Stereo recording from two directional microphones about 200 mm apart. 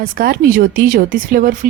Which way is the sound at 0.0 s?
45° right (ahead or behind).